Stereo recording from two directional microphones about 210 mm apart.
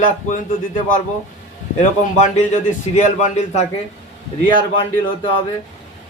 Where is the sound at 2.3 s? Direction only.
35° left (ahead or behind).